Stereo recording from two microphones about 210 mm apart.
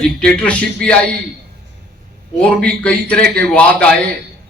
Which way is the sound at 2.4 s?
5° left (ahead or behind).